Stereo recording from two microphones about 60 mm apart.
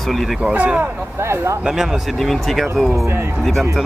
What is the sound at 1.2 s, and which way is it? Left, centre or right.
Speech, right.